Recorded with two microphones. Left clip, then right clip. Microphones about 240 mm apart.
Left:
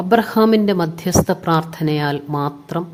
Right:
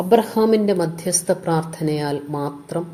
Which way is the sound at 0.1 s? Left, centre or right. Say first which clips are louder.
Left 2 dB; left.